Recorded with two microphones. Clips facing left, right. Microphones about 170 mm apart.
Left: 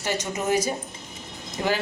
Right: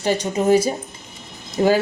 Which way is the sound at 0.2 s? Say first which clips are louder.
Right 8 dB; 30° right (ahead or behind).